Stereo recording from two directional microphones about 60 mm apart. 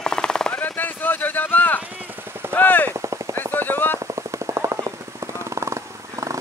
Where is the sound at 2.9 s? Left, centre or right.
Right.